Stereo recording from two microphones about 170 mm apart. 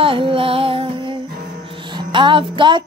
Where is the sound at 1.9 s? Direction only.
25° right (ahead or behind).